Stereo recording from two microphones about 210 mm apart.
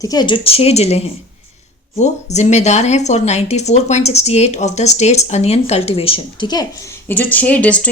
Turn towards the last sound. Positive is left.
turn(degrees=5)  # may be behind; listen again after turning